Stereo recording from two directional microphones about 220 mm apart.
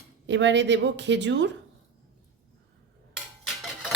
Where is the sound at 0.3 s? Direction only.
55° right (ahead or behind).